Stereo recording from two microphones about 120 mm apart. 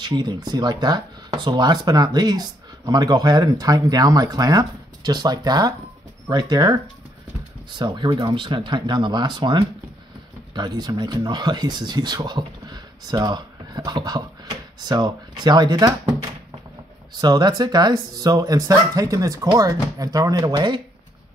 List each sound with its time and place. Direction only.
0.0 s speech: 35° right (ahead or behind)